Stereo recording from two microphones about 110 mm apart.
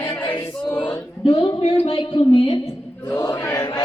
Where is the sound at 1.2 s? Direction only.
50° left (ahead or behind).